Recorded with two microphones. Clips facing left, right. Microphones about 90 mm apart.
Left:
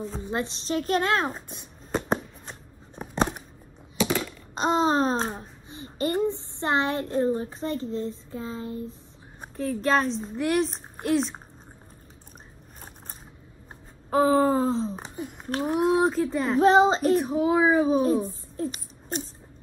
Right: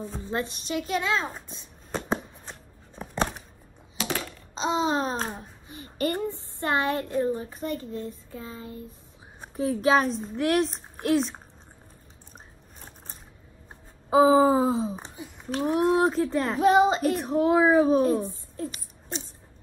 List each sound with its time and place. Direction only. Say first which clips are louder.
0.1 s a woman's voice: left 1 dB; 20° left (ahead or behind); by 1.3 s 55° left (ahead or behind)
3.0 s a sound: left 2 dB; 15° left (ahead or behind)
4.6 s a woman's voice: left 3 dB; 50° left (ahead or behind)
5.2 s a child's voice: left 2 dB; 25° left (ahead or behind)
9.6 s a woman's voice: right 2 dB; 5° right (ahead or behind)
14.1 s a sound: right 3 dB; 5° right (ahead or behind)
15.0 s a sound: left 3 dB; 50° left (ahead or behind)
15.6 s a woman's voice: even; centre (ahead or behind)
16.6 s speech: left 1 dB; 30° left (ahead or behind)
17.1 s a woman's voice: left 1 dB; centre (ahead or behind)
18.6 s speech: left 3 dB; 30° left (ahead or behind)